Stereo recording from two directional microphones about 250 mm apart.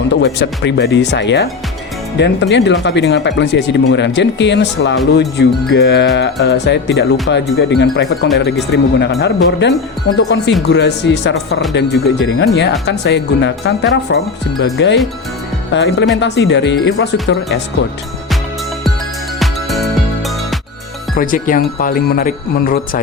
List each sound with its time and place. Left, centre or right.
0.1 s speech: left
19.4 s music: centre
21.2 s speech: left